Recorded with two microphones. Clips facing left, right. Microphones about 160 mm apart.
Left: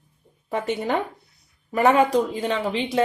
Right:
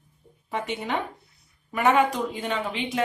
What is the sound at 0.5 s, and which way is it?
A woman's voice, 40° left (ahead or behind).